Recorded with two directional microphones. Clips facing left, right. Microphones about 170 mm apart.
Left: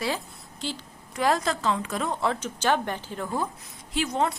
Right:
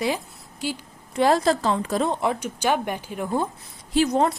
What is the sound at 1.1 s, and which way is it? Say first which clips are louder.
Speech: right 6 dB; 30° right (ahead or behind).